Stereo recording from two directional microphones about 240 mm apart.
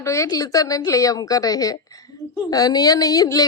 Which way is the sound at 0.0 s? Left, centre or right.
Centre.